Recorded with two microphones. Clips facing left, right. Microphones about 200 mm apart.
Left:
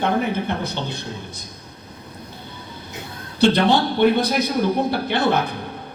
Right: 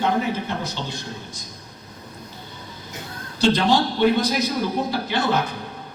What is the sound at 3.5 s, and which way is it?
A man's voice, 60° left (ahead or behind).